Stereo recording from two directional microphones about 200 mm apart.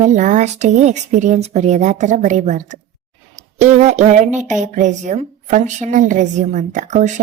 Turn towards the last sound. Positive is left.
turn(degrees=-35)  # may be behind; listen again after turning